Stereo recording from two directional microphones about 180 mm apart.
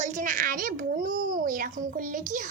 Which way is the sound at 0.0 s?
45° right (ahead or behind).